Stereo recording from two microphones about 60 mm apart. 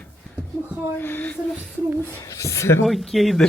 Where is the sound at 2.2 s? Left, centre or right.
Left.